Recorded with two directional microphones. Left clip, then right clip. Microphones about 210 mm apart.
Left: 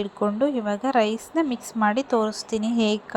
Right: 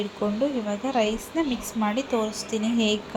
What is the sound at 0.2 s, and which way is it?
A woman's voice, 35° left (ahead or behind).